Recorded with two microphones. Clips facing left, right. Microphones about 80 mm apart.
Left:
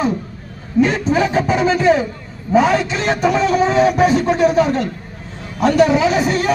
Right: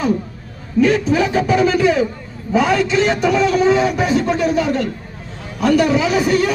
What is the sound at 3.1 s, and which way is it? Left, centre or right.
Speech, left.